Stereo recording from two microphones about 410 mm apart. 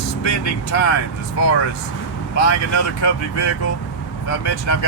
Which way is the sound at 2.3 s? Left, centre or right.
Left.